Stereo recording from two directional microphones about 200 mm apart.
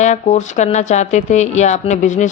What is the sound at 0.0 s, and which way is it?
Speech, 35° left (ahead or behind).